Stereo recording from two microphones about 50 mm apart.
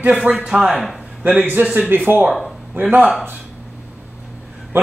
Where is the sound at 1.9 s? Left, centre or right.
Right.